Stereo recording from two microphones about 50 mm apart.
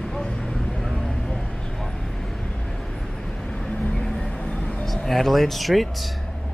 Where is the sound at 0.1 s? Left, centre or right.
Centre.